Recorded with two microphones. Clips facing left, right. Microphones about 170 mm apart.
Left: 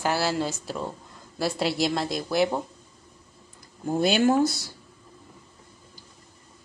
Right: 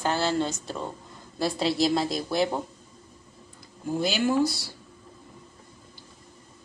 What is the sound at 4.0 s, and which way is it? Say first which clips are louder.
Speech: left 3 dB; 55° left (ahead or behind).